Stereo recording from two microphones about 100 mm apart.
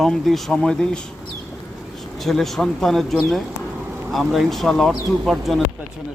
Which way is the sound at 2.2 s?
5° left (ahead or behind).